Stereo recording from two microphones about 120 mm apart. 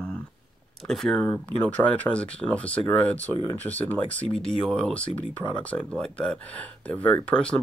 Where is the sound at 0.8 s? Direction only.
5° left (ahead or behind).